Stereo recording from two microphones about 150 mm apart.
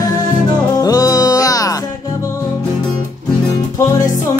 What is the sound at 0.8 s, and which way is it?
Music, 25° left (ahead or behind).